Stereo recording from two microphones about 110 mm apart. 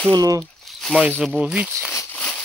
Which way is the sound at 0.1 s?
35° right (ahead or behind).